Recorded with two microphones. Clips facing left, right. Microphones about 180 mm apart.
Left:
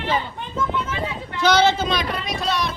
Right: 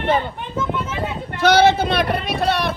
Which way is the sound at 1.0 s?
60° right (ahead or behind).